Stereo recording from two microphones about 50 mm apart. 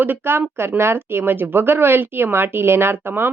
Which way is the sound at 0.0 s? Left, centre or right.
Right.